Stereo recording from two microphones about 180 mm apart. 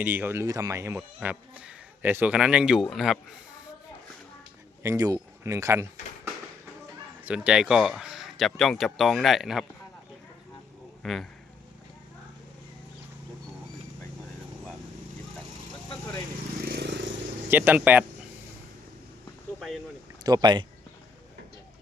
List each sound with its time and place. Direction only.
0.0 s speech: 10° right (ahead or behind)
4.8 s speech: 20° right (ahead or behind)
7.3 s speech: 5° right (ahead or behind)
11.0 s speech: centre (ahead or behind)
16.6 s vehicle: 65° right (ahead or behind)
17.5 s speech: 10° right (ahead or behind)
19.5 s speech: centre (ahead or behind)
20.2 s speech: 25° right (ahead or behind)